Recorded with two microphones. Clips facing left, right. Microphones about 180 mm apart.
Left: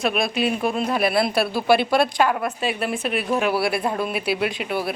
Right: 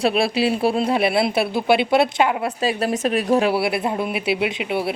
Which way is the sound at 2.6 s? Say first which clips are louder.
Right 4 dB; 40° right (ahead or behind).